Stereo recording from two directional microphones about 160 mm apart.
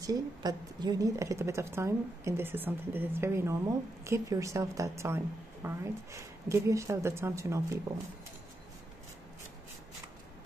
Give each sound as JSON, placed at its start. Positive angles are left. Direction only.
{"t": 0.0, "sound": "a woman's voice", "side_deg": -25}